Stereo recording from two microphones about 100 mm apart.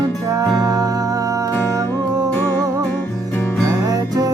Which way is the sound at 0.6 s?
40° right (ahead or behind).